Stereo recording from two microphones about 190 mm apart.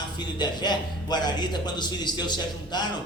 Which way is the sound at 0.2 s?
25° left (ahead or behind).